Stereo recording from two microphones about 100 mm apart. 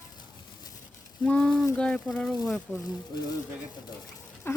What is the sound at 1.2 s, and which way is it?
Speech, 10° left (ahead or behind).